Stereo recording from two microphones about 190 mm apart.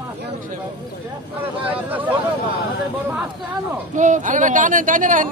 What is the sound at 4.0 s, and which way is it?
Speech, 40° right (ahead or behind).